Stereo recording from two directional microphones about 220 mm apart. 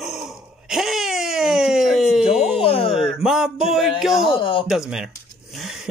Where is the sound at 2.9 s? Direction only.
Centre (ahead or behind).